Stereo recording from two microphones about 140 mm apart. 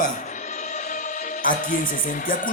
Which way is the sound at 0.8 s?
65° left (ahead or behind).